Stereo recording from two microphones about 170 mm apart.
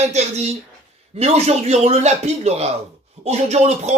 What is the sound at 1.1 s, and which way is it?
Speech, 35° right (ahead or behind).